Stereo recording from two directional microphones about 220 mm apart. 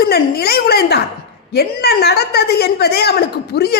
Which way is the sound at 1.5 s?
45° left (ahead or behind).